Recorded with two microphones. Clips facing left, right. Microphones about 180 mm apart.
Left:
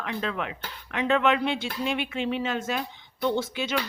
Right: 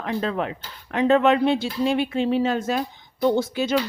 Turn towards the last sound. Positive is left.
turn(degrees=-40)  # may be behind; listen again after turning